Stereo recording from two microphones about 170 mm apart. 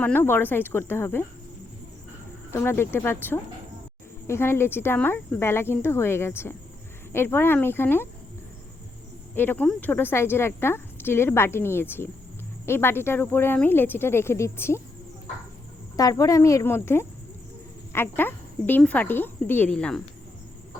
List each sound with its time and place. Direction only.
0.0 s speech: 10° left (ahead or behind)
2.5 s speech: 15° left (ahead or behind)
9.3 s speech: 10° left (ahead or behind)
16.0 s speech: 20° left (ahead or behind)